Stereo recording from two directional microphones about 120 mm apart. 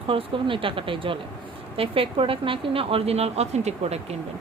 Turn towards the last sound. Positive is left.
turn(degrees=-65)  # may be behind; listen again after turning